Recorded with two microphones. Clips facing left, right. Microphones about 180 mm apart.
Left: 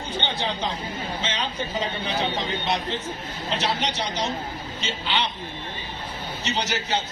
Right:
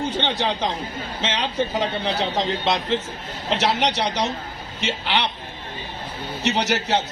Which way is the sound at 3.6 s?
75° right (ahead or behind).